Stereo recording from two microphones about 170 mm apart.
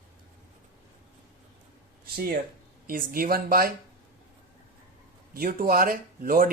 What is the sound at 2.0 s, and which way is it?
Speech, 65° right (ahead or behind).